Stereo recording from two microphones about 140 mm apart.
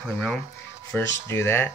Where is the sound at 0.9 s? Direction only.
20° left (ahead or behind).